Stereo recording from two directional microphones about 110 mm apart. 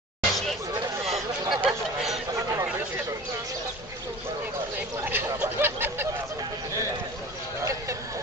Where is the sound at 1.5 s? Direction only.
5° right (ahead or behind).